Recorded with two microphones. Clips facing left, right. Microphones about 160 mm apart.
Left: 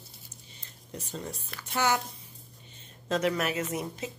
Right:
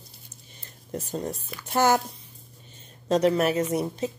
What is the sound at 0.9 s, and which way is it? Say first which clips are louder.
Speech: right 8 dB; 45° right (ahead or behind).